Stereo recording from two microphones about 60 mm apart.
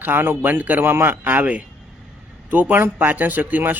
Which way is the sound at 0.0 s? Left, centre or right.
Right.